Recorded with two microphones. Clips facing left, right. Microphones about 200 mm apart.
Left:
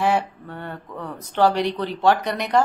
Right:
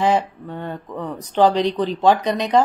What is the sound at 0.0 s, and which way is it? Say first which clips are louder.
Speech: right 3 dB; 15° right (ahead or behind).